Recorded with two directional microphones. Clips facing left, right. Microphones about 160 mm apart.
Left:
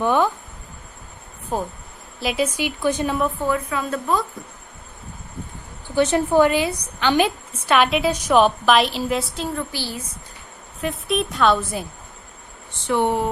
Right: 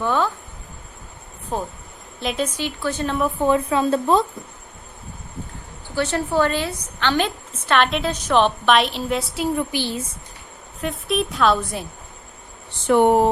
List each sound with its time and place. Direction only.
0.0 s a woman's voice: 15° left (ahead or behind)
1.5 s a woman's voice: 10° left (ahead or behind)
3.4 s a woman's voice: 25° right (ahead or behind)
5.9 s a woman's voice: 20° left (ahead or behind); by 9.4 s centre (ahead or behind)
9.4 s a woman's voice: 15° right (ahead or behind)
10.8 s a woman's voice: centre (ahead or behind)
12.9 s speech: 50° right (ahead or behind)